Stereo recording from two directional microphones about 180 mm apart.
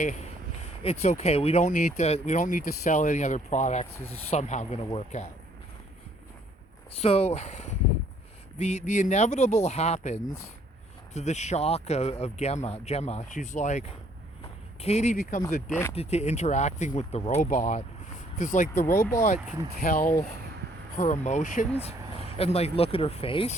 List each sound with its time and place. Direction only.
0.9 s speech: 35° left (ahead or behind)
7.0 s speech: 35° left (ahead or behind)
15.7 s speech: 15° left (ahead or behind)
16.0 s speech: 35° left (ahead or behind)
17.4 s speech: 45° left (ahead or behind)
21.8 s speech: 35° left (ahead or behind)